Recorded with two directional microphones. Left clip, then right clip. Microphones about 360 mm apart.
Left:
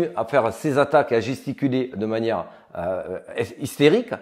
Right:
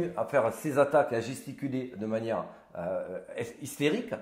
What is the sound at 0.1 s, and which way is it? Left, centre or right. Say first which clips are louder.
A man's voice: left 7 dB; left.